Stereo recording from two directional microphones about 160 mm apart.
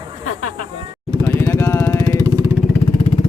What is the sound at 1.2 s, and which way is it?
Vehicle, 15° left (ahead or behind).